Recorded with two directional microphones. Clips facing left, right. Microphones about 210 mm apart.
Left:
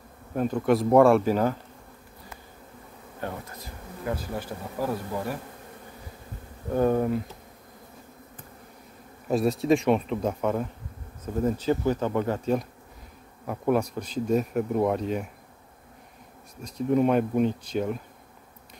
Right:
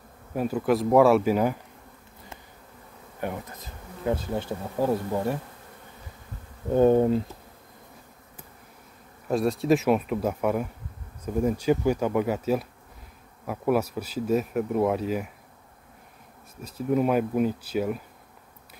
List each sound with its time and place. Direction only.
0.3 s speech: 5° right (ahead or behind)
3.2 s bee: 15° right (ahead or behind)
6.7 s bee: 25° right (ahead or behind)
9.3 s speech: centre (ahead or behind)
16.6 s speech: 5° right (ahead or behind)